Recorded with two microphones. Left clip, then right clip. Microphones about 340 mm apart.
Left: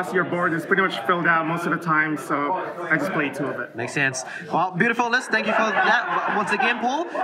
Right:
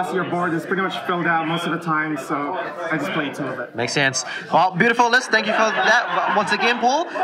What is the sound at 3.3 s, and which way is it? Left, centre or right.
A man's voice, centre.